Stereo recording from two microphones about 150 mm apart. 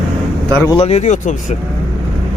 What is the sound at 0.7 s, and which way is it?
Speech, 45° left (ahead or behind).